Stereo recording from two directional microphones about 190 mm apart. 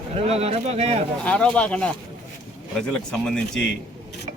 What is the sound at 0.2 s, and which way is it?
Speech, 35° right (ahead or behind).